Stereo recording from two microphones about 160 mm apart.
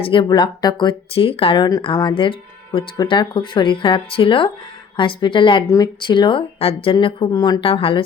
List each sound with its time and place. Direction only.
0.0 s speech: 30° left (ahead or behind)
7.6 s speech: 35° left (ahead or behind)